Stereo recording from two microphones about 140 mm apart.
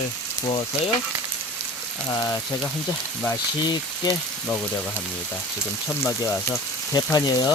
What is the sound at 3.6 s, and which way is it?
Speech, 30° left (ahead or behind).